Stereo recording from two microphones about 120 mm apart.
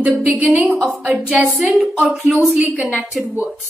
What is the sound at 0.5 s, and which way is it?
A woman's voice, centre (ahead or behind).